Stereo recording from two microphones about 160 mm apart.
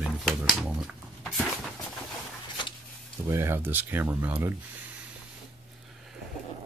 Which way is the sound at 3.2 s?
15° right (ahead or behind).